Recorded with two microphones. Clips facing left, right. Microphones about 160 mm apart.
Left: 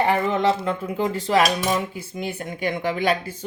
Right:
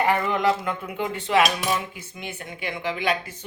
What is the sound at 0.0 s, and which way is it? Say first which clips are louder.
A woman's voice: left 2 dB; 25° left (ahead or behind).